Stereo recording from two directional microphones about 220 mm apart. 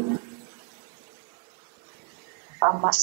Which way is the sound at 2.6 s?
25° right (ahead or behind).